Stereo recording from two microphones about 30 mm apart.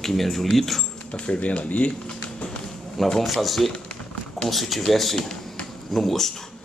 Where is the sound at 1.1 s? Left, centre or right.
Left.